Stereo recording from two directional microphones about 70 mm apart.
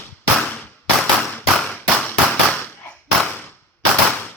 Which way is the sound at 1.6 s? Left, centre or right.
Centre.